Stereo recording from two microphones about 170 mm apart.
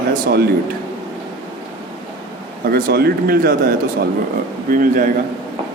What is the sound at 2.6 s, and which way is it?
A man's voice, 65° right (ahead or behind).